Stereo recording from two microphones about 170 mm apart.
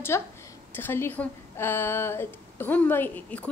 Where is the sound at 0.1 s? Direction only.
15° left (ahead or behind).